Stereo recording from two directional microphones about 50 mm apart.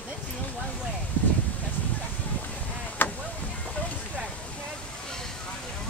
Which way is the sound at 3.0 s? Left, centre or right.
Left.